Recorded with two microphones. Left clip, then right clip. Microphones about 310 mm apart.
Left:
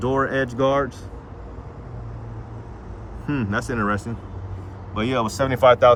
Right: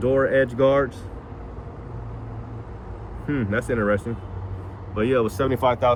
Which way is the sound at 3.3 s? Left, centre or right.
Centre.